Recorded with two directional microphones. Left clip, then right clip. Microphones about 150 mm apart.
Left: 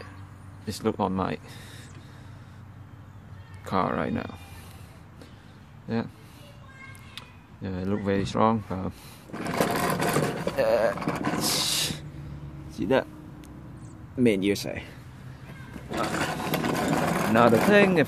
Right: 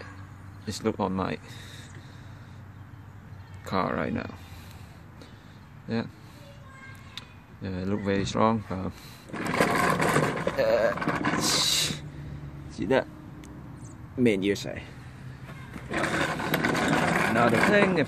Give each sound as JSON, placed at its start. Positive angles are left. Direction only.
{"t": 0.7, "sound": "speech", "side_deg": 10}
{"t": 3.6, "sound": "speech", "side_deg": 15}
{"t": 7.2, "sound": "a sound", "side_deg": 10}
{"t": 10.5, "sound": "vehicle", "side_deg": 15}
{"t": 14.2, "sound": "speech", "side_deg": 10}
{"t": 14.5, "sound": "speech", "side_deg": 25}
{"t": 15.9, "sound": "roar", "side_deg": 25}
{"t": 17.6, "sound": "speech", "side_deg": 30}